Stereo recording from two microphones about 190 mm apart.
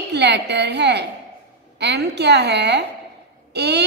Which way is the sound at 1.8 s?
60° right (ahead or behind).